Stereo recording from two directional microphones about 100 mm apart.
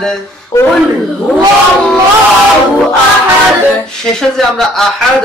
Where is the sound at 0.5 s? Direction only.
30° left (ahead or behind).